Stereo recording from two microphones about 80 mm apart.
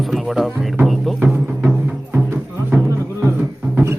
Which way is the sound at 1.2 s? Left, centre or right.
Centre.